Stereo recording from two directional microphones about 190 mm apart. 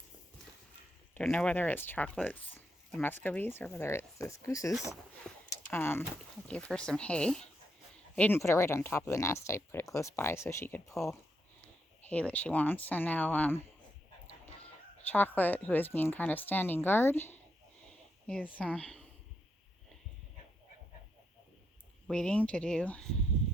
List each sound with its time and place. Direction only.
1.1 s speech: 5° left (ahead or behind)
5.5 s a sound: 10° left (ahead or behind)
6.5 s speech: 5° left (ahead or behind)
15.0 s speech: 10° left (ahead or behind)
18.5 s speech: 5° left (ahead or behind)
22.0 s speech: 5° left (ahead or behind)